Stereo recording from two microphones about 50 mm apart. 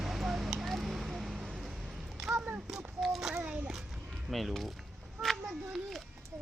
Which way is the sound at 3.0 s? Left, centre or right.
Centre.